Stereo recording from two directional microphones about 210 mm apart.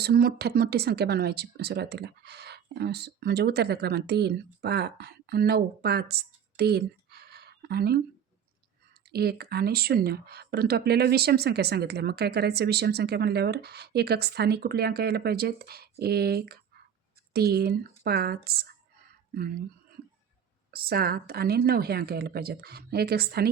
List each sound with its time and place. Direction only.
0.0 s speech: 45° right (ahead or behind)
9.1 s speech: 50° right (ahead or behind)
20.7 s speech: 45° right (ahead or behind)